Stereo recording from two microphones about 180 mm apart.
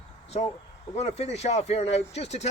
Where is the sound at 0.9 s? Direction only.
35° left (ahead or behind).